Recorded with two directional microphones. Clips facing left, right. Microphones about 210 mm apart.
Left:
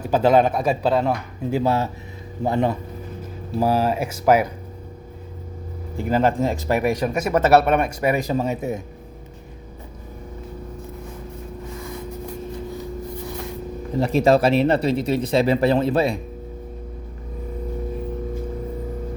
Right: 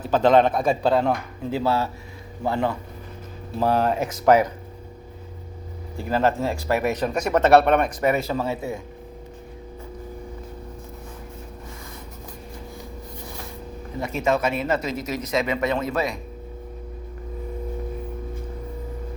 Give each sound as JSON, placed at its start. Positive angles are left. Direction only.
{"t": 0.0, "sound": "speech", "side_deg": 10}
{"t": 3.6, "sound": "speech", "side_deg": 5}
{"t": 6.0, "sound": "speech", "side_deg": 15}
{"t": 14.0, "sound": "speech", "side_deg": 35}